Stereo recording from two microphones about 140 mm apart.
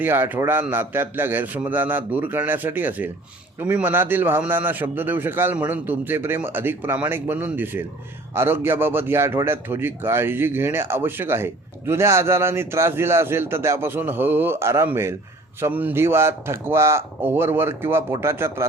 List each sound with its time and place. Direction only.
0.0 s a man's voice: 15° right (ahead or behind)